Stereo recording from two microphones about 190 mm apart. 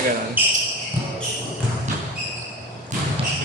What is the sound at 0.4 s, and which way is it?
Speech, 10° right (ahead or behind).